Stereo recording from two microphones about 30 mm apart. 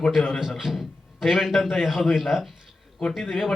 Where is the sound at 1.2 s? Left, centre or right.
Centre.